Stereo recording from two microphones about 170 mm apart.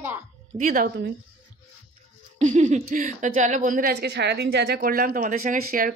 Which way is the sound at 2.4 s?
45° right (ahead or behind).